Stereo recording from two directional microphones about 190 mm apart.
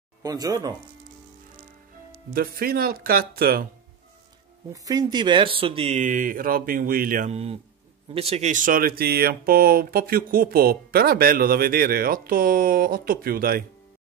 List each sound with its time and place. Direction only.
0.2 s speech: 20° right (ahead or behind)
2.3 s speech: 50° right (ahead or behind)
4.8 s speech: 20° right (ahead or behind); by 13.7 s 50° right (ahead or behind)